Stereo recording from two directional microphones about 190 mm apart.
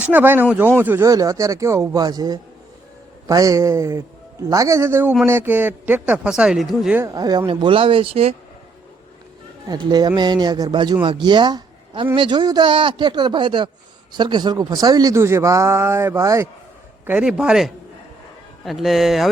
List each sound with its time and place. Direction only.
0.0 s speech: 10° right (ahead or behind)
7.0 s a man's voice: 20° right (ahead or behind)
9.6 s a man's voice: 20° right (ahead or behind); by 19.3 s centre (ahead or behind)